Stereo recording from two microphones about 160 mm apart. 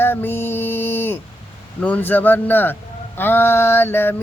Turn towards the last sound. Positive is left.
turn(degrees=15)  # may be behind; listen again after turning